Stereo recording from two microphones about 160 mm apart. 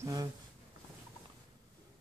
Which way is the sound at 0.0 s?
25° right (ahead or behind).